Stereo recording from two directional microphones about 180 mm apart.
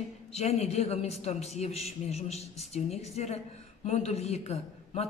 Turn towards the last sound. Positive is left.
turn(degrees=35)  # may be behind; listen again after turning